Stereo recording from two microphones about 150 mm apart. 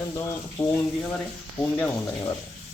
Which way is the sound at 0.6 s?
15° left (ahead or behind).